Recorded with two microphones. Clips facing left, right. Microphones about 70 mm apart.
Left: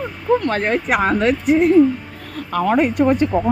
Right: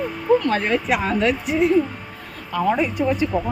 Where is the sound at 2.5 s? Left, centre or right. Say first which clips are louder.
Left 4 dB; left.